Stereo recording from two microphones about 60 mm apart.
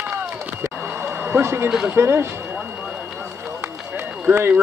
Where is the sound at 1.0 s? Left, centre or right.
Right.